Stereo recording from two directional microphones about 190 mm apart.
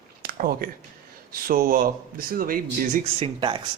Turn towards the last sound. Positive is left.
turn(degrees=-25)  # may be behind; listen again after turning